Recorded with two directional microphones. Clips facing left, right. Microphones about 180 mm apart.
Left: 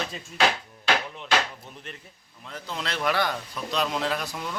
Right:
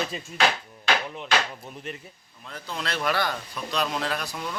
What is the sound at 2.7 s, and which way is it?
A man's voice, 20° left (ahead or behind).